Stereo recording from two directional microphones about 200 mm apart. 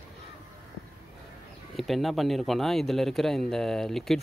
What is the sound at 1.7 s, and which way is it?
Speech, centre (ahead or behind).